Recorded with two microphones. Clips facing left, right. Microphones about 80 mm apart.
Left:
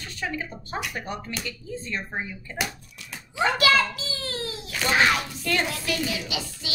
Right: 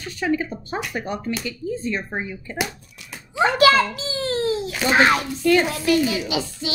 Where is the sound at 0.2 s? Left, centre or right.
Right.